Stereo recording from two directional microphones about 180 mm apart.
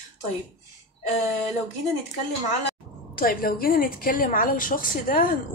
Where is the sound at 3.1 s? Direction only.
55° left (ahead or behind).